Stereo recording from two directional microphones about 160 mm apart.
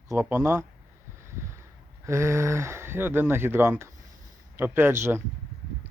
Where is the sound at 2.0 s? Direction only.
15° right (ahead or behind).